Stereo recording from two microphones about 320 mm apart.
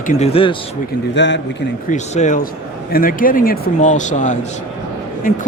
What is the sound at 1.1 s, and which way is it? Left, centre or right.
Speech, left.